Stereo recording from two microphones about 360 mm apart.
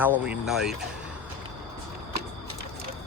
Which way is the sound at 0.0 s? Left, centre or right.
Centre.